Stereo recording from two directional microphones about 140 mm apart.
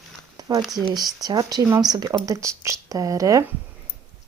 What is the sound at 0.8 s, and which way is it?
Speech, 30° right (ahead or behind).